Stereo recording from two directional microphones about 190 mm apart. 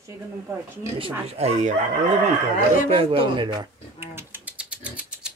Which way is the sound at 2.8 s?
30° right (ahead or behind).